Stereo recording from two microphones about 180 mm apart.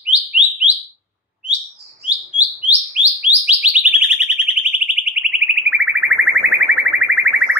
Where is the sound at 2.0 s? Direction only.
5° right (ahead or behind).